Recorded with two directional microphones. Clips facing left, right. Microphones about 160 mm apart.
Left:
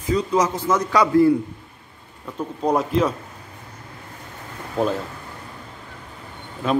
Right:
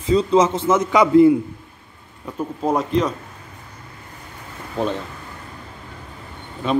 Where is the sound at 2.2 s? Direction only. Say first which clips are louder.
Right 1 dB; 5° right (ahead or behind).